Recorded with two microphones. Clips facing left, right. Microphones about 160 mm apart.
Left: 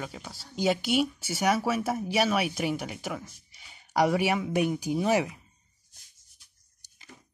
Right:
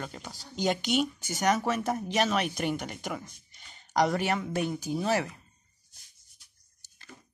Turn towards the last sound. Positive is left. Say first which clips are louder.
# right 1 dB
turn(degrees=15)  # may be behind; listen again after turning